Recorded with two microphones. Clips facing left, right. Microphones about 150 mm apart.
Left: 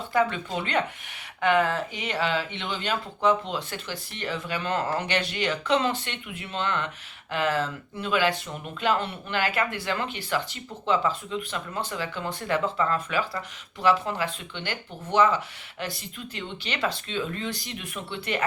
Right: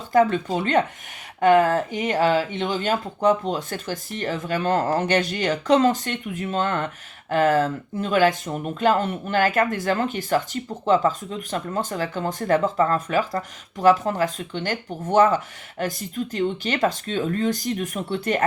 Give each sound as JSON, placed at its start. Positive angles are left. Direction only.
{"t": 0.1, "sound": "speech", "side_deg": -40}